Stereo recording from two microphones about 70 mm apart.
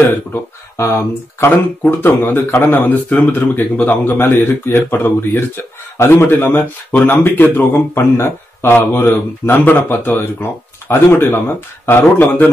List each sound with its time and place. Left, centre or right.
0.0 s a man's voice: left